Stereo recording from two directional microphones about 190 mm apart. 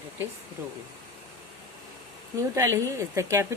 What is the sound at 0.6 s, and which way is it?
Speech, 15° right (ahead or behind).